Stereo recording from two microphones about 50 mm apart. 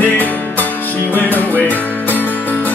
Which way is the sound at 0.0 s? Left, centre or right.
Left.